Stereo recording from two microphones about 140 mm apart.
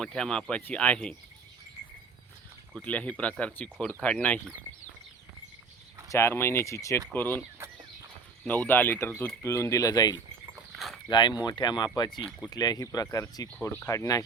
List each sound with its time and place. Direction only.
0.0 s speech: 5° left (ahead or behind)
2.7 s speech: 10° left (ahead or behind)
6.1 s speech: 20° left (ahead or behind)
8.4 s speech: 15° left (ahead or behind)